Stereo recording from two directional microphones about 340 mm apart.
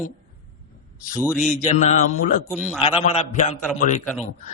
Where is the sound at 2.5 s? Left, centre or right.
Centre.